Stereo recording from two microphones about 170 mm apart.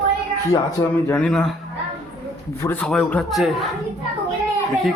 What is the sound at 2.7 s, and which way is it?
Speech, 5° left (ahead or behind).